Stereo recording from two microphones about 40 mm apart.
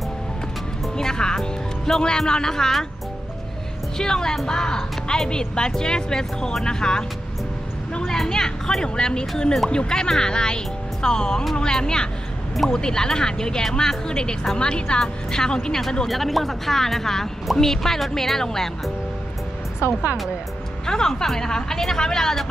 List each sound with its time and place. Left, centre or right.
0.9 s a woman's voice: centre
4.0 s a woman's voice: centre
8.1 s a woman's voice: centre
16.1 s a woman's voice: centre
20.8 s a woman's voice: centre